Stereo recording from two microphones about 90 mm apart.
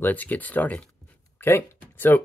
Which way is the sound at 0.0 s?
20° left (ahead or behind).